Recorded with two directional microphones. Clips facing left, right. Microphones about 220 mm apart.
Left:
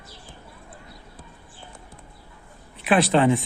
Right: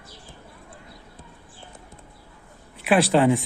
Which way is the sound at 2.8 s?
10° right (ahead or behind).